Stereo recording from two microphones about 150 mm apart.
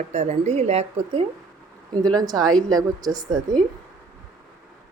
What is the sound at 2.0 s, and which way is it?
Speech, 25° right (ahead or behind).